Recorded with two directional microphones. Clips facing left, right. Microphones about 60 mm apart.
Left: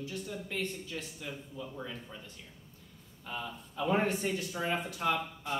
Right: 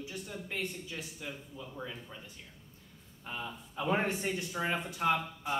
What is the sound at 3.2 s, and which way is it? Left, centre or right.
Speech, centre.